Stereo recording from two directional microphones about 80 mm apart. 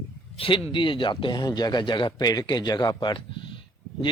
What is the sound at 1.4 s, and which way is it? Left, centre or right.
A man's voice, left.